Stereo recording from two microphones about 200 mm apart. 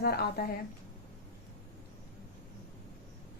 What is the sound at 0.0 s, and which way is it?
Speech, 50° left (ahead or behind).